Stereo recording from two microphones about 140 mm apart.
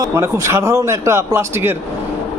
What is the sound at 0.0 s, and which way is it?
A man's voice, 20° right (ahead or behind).